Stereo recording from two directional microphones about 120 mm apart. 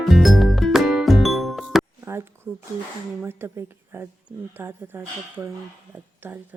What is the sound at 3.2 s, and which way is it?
Speech, 20° right (ahead or behind).